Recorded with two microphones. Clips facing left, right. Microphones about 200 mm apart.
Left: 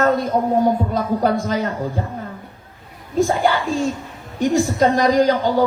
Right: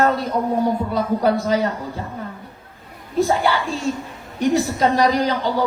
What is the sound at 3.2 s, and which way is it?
Speech, 50° left (ahead or behind).